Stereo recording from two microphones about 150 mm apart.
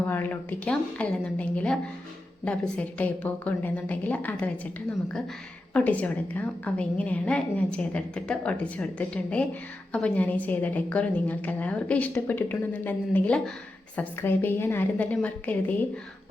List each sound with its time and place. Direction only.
0.1 s a woman's voice: 10° left (ahead or behind)
5.7 s a woman's voice: 10° left (ahead or behind)